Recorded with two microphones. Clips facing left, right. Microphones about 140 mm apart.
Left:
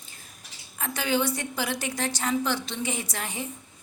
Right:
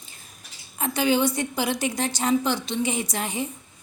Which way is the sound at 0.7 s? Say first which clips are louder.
Right 5 dB; 20° right (ahead or behind).